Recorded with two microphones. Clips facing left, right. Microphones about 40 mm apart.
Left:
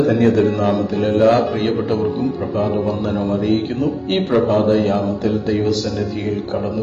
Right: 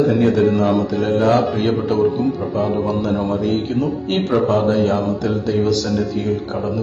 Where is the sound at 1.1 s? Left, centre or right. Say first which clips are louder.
Left 2 dB; centre.